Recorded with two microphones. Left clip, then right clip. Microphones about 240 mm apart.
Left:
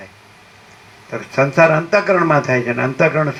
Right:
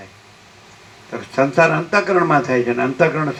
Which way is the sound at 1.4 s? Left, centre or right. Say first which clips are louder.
Left 2 dB; left.